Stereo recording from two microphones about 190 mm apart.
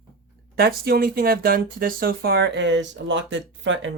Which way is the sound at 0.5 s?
55° right (ahead or behind).